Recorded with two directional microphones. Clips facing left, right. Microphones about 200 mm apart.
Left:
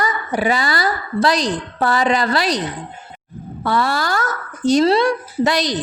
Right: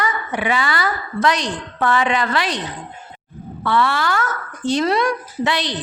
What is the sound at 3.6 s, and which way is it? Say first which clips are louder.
A woman's voice: even; 40° left (ahead or behind).